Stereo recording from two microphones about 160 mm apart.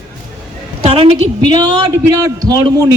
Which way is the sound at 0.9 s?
35° right (ahead or behind).